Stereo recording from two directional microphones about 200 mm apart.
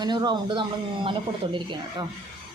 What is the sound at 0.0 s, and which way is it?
A man's voice, 20° right (ahead or behind).